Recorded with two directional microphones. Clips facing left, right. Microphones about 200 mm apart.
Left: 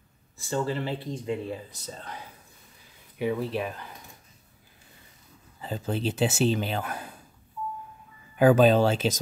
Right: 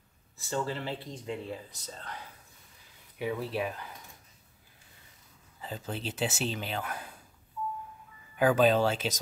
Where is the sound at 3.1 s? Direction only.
5° right (ahead or behind).